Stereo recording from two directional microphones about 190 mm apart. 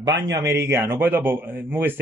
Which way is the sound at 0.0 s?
20° right (ahead or behind).